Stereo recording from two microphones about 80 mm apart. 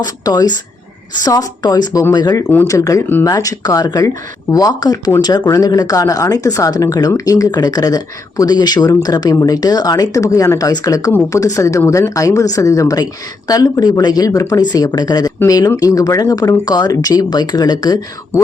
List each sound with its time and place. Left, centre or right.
0.0 s speech: left
14.6 s speech: left